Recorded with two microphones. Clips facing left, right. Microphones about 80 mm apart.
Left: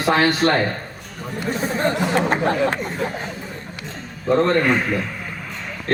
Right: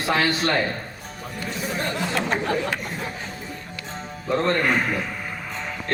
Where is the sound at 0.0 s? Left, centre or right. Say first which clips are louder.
Left 5 dB; left.